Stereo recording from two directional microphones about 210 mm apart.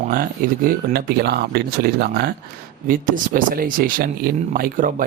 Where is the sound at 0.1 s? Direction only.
40° right (ahead or behind).